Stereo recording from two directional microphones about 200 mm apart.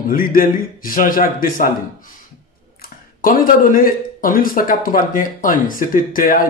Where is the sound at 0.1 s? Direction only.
45° left (ahead or behind).